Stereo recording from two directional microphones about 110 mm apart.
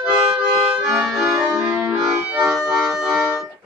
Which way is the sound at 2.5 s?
5° right (ahead or behind).